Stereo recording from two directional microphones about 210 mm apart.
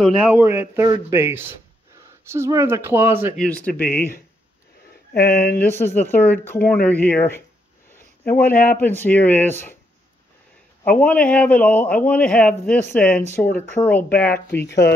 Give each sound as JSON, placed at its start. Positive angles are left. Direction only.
{"t": 0.0, "sound": "speech", "side_deg": -5}
{"t": 3.3, "sound": "a man's voice", "side_deg": 5}
{"t": 5.1, "sound": "speech", "side_deg": 45}
{"t": 5.6, "sound": "a man's voice", "side_deg": 10}
{"t": 8.3, "sound": "speech", "side_deg": 45}
{"t": 8.7, "sound": "a man's voice", "side_deg": 10}
{"t": 10.8, "sound": "a man's voice", "side_deg": 5}